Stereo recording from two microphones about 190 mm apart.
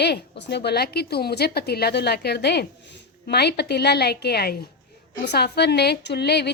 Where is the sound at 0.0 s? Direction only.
60° left (ahead or behind).